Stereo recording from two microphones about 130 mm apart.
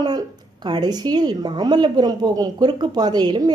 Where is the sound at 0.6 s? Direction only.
30° right (ahead or behind).